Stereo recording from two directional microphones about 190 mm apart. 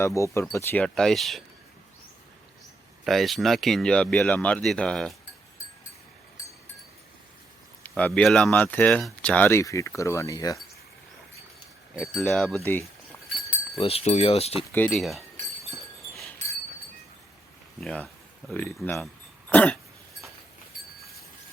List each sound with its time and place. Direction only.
0.0 s speech: 15° left (ahead or behind)
3.0 s speech: centre (ahead or behind)
7.9 s speech: 5° left (ahead or behind)
11.9 s speech: centre (ahead or behind)
13.7 s speech: 30° left (ahead or behind)
14.7 s speech: 10° left (ahead or behind)
16.1 s a sound: centre (ahead or behind)
17.7 s speech: 5° left (ahead or behind)
19.5 s cough: 10° left (ahead or behind)